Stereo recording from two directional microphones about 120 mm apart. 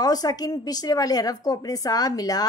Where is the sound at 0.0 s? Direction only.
30° left (ahead or behind).